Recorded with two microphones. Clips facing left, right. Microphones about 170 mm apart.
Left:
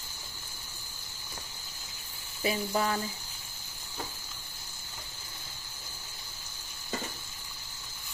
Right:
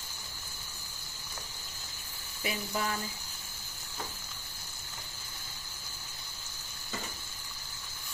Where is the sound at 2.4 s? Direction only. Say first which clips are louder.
Left 5 dB; 30° left (ahead or behind).